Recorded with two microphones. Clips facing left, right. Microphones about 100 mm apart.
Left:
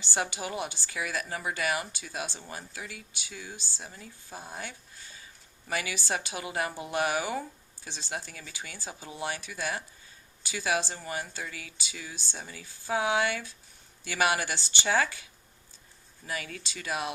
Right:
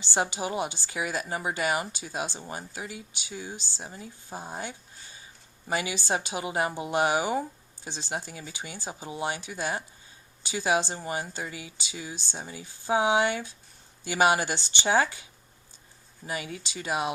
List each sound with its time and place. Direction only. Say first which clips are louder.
0.0 s a woman's voice: right 4 dB; 20° right (ahead or behind)